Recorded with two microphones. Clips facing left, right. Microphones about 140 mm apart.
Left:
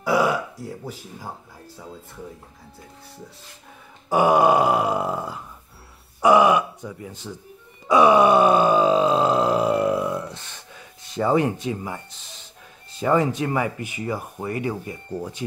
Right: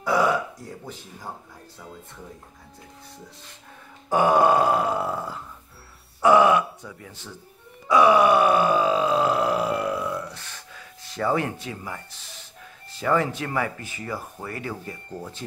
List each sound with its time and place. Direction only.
0.0 s burping: 10° left (ahead or behind)
4.1 s speech: 15° left (ahead or behind)
7.9 s groan: 20° left (ahead or behind)
13.0 s speech: 20° left (ahead or behind)